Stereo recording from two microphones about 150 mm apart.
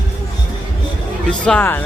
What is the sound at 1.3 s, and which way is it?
Speech, 10° left (ahead or behind).